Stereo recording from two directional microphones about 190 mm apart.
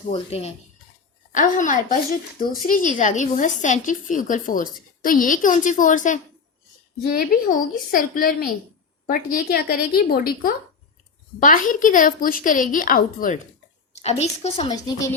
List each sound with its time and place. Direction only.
0.1 s a woman's voice: 35° left (ahead or behind)
13.9 s a woman's voice: 35° left (ahead or behind)
14.7 s speech: 20° left (ahead or behind)